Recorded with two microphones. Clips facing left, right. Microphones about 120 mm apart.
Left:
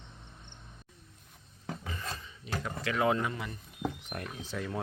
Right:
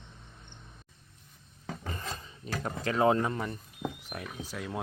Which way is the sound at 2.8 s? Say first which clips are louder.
Right 4 dB; 35° right (ahead or behind).